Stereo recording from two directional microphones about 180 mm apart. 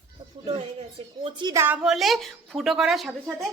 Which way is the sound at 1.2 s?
25° right (ahead or behind).